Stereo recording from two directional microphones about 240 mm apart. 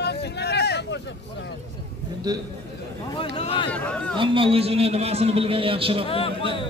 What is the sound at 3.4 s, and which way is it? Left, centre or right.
Speech, left.